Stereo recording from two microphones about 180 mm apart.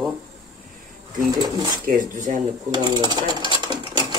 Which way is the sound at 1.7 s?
45° right (ahead or behind).